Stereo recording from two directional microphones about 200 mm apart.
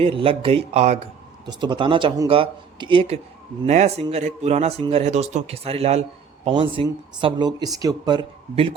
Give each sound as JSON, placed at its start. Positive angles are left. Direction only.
{"t": 0.0, "sound": "speech", "side_deg": -25}
{"t": 1.5, "sound": "a man's voice", "side_deg": -25}